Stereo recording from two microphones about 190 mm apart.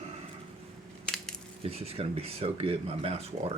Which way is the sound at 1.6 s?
30° right (ahead or behind).